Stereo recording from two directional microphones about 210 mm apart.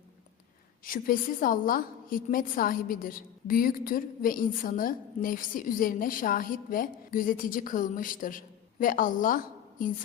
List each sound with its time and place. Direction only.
0.9 s a woman's voice: 40° left (ahead or behind)